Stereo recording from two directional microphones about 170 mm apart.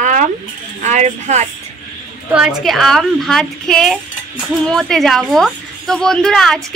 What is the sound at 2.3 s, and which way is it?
A woman's voice, 5° right (ahead or behind).